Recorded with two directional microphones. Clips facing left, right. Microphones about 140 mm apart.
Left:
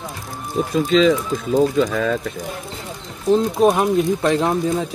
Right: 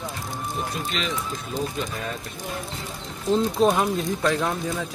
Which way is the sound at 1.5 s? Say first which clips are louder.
Left 14 dB; 90° left.